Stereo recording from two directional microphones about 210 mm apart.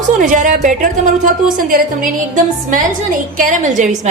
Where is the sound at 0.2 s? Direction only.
40° right (ahead or behind).